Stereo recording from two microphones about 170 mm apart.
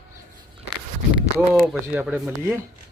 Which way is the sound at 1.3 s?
Centre (ahead or behind).